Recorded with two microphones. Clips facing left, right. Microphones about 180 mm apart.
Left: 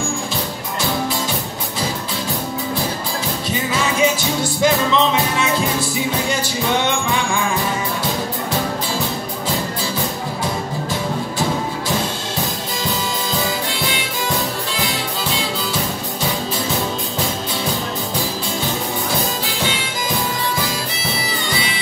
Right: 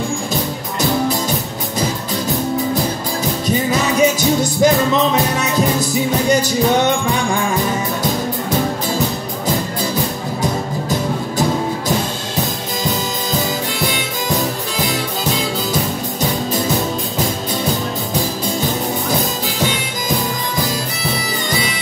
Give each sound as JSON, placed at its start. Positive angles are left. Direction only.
{"t": 3.4, "sound": "music", "side_deg": -40}
{"t": 14.8, "sound": "music", "side_deg": -40}
{"t": 21.1, "sound": "bagpipes", "side_deg": -45}